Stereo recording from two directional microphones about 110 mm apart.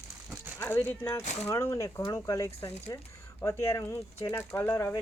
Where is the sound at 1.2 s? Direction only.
90° left.